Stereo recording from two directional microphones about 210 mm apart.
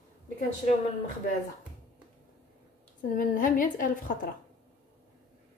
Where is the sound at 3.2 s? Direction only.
40° left (ahead or behind).